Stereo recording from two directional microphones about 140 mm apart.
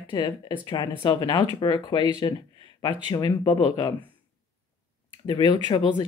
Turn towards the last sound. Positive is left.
turn(degrees=35)  # may be behind; listen again after turning